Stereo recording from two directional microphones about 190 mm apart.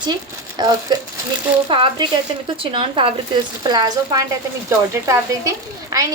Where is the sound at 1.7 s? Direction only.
25° right (ahead or behind).